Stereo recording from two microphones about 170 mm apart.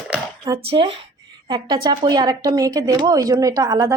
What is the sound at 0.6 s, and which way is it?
Speech, 35° right (ahead or behind).